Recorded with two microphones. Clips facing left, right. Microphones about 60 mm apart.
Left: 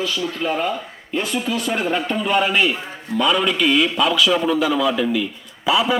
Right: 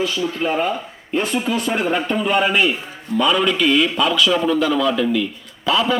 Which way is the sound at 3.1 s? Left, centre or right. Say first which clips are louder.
Right 1 dB; centre.